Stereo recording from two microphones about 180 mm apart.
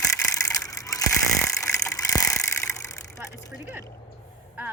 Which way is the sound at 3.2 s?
15° right (ahead or behind).